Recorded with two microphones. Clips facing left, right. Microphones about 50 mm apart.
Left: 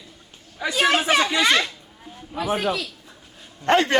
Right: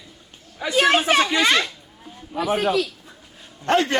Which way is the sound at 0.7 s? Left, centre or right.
Right.